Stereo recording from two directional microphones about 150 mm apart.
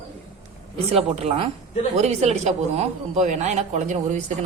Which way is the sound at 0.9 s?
40° right (ahead or behind).